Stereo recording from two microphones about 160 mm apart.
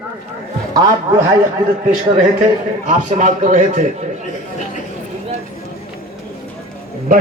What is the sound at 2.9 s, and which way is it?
Speech, 50° right (ahead or behind).